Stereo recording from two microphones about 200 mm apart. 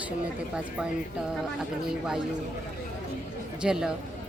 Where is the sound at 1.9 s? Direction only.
5° right (ahead or behind).